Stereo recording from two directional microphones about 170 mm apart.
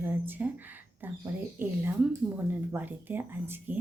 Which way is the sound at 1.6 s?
10° right (ahead or behind).